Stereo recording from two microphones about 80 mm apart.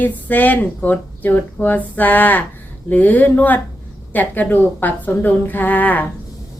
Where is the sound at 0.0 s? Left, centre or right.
Left.